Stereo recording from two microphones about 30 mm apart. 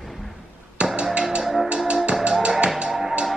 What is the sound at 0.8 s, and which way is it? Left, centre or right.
Music, right.